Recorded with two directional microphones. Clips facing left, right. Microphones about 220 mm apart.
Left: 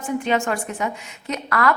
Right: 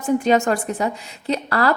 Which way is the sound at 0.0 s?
40° right (ahead or behind).